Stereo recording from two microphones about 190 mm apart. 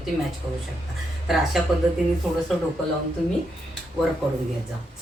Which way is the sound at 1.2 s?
Centre (ahead or behind).